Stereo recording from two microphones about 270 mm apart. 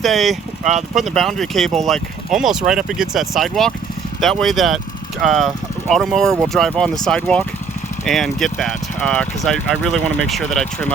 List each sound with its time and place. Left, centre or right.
0.0 s speech: centre
0.6 s speech: right
0.9 s speech: centre